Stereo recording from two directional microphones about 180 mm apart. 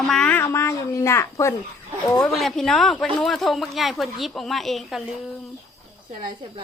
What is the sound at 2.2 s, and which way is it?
Speech, centre (ahead or behind).